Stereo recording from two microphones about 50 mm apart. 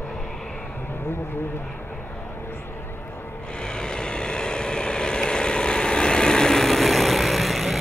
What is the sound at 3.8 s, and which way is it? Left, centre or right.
Vehicle, centre.